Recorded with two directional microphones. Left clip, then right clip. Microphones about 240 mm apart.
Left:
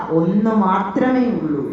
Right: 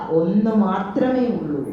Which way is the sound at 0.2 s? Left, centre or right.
Left.